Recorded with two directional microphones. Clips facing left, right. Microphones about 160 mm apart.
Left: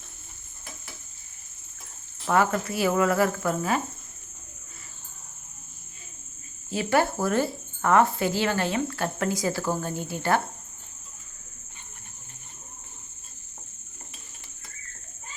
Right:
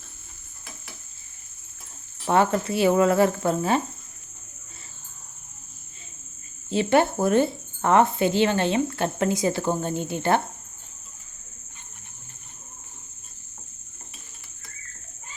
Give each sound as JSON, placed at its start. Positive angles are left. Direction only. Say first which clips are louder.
{"t": 2.2, "sound": "speech", "louder": "right 2 dB", "side_deg": -25}
{"t": 6.7, "sound": "speech", "louder": "right 4 dB", "side_deg": -25}